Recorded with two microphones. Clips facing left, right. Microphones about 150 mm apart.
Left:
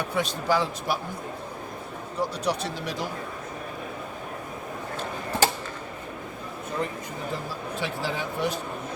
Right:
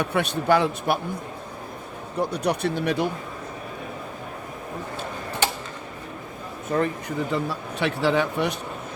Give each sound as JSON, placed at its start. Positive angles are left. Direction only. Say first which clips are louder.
{"t": 0.0, "sound": "speech", "louder": "right 4 dB", "side_deg": -65}
{"t": 2.1, "sound": "speech", "louder": "right 3 dB", "side_deg": -60}
{"t": 6.7, "sound": "a man's voice", "louder": "right 8 dB", "side_deg": -60}